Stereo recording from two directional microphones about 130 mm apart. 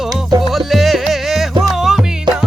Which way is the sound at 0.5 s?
Centre (ahead or behind).